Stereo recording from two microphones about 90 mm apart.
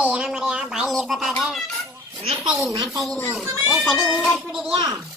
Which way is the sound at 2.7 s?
40° right (ahead or behind).